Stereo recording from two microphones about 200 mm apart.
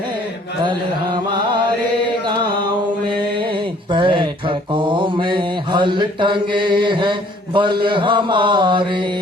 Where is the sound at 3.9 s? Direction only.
25° right (ahead or behind).